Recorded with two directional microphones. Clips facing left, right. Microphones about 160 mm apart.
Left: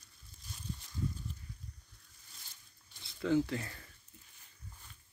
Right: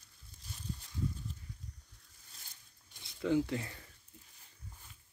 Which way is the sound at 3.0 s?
15° right (ahead or behind).